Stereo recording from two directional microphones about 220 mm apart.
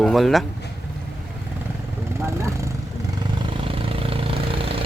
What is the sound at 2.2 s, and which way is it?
Vehicle, 15° right (ahead or behind).